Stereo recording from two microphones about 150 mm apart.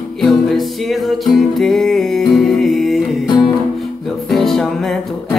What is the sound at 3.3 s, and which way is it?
Music, 30° left (ahead or behind).